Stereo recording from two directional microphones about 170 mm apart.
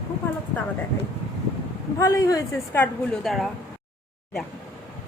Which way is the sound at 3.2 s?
Centre (ahead or behind).